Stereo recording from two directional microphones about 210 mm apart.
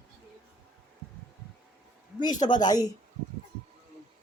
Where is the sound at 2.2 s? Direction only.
20° left (ahead or behind).